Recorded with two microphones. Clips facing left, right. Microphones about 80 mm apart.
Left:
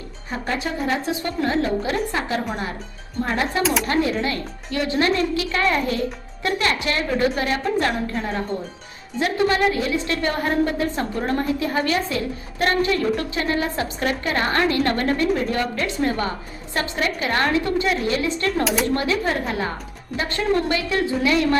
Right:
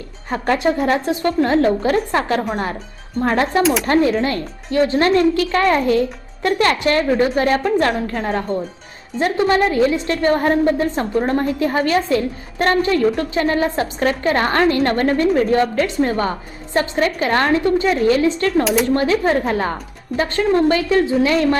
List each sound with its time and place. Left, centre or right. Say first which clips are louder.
0.4 s speech: right 8 dB; right
0.8 s a woman's voice: right 6 dB; right
3.6 s speech: right 4 dB; centre
3.8 s a woman's voice: right 6 dB; right